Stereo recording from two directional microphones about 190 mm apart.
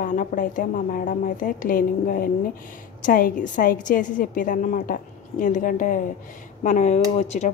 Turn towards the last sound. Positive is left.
turn(degrees=35)  # may be behind; listen again after turning